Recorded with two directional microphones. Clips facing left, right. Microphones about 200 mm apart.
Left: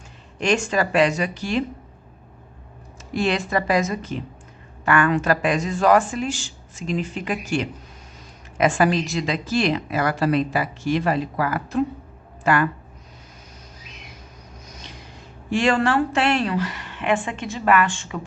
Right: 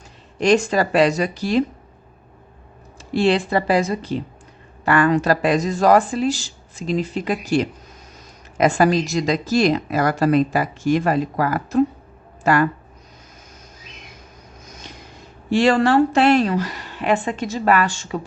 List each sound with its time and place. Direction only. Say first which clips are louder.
0.3 s a woman's voice: right 5 dB; 35° right (ahead or behind)
3.1 s a woman's voice: right 5 dB; 30° right (ahead or behind)
14.7 s a sound: right 3 dB; 50° right (ahead or behind)
15.4 s a woman's voice: right 4 dB; 35° right (ahead or behind)